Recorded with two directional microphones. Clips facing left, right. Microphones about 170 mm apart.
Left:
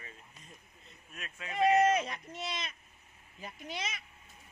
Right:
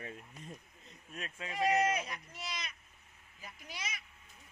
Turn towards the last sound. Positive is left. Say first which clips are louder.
# left 6 dB
turn(degrees=25)  # may be behind; listen again after turning